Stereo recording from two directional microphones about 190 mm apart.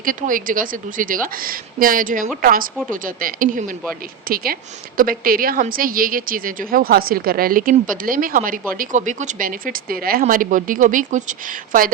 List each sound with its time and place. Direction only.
0.0 s a woman's voice: 45° right (ahead or behind)